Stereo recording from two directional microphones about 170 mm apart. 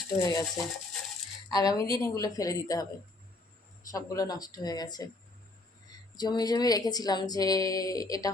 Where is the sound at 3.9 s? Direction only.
20° left (ahead or behind).